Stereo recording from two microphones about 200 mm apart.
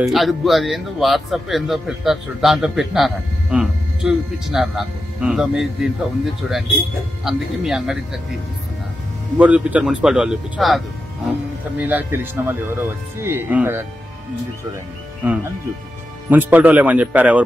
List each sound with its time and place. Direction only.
0.0 s speech: centre (ahead or behind)
9.4 s speech: 5° right (ahead or behind)
11.8 s speech: 10° right (ahead or behind)
15.2 s speech: 10° right (ahead or behind)